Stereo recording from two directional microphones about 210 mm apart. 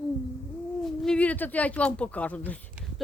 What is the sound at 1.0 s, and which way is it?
Speech, 5° left (ahead or behind).